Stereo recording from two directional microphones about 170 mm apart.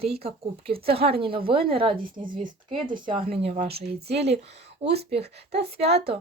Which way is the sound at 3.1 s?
30° right (ahead or behind).